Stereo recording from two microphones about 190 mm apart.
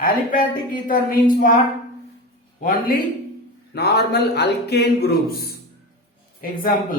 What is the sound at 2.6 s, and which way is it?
A woman's voice, 50° left (ahead or behind).